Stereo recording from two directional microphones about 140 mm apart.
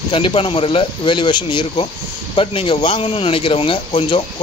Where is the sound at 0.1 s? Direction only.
35° left (ahead or behind).